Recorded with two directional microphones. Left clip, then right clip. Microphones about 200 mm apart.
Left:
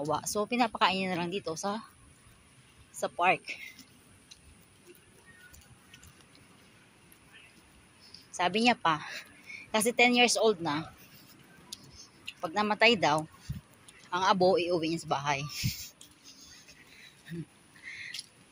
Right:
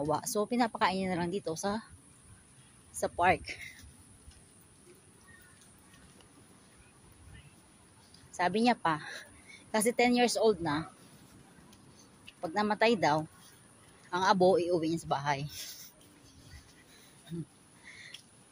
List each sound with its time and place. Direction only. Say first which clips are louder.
0.0 s speech: even; 15° right (ahead or behind)
2.9 s speech: even; 20° right (ahead or behind)
8.4 s speech: left 2 dB; 10° right (ahead or behind)
12.4 s speech: left 2 dB; 10° right (ahead or behind)
17.8 s owl: left 8 dB; 10° right (ahead or behind)